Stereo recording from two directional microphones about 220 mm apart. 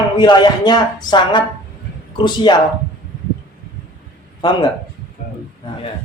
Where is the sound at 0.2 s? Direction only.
20° left (ahead or behind).